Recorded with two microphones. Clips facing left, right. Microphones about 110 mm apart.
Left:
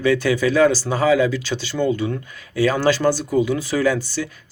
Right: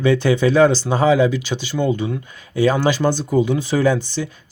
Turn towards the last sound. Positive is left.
turn(degrees=-25)  # may be behind; listen again after turning